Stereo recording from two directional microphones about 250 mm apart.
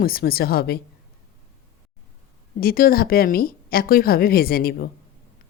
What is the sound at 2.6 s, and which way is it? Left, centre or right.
A woman's voice, left.